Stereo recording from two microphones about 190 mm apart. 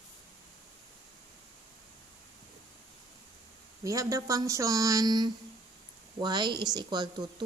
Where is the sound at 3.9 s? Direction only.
15° right (ahead or behind).